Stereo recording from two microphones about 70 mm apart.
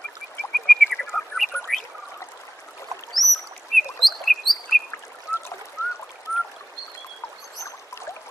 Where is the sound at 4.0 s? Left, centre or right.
Centre.